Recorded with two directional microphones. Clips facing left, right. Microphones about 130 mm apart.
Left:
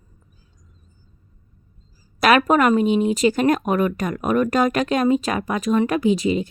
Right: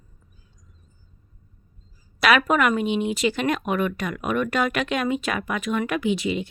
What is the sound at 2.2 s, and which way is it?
Speech, 45° left (ahead or behind).